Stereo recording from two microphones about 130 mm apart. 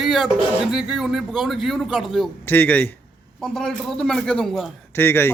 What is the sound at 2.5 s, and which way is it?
Speech, 15° left (ahead or behind).